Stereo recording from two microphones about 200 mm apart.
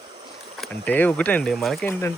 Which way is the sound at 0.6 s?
10° left (ahead or behind).